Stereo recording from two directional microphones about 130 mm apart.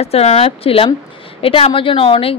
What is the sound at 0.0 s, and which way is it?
A woman's voice, 55° left (ahead or behind).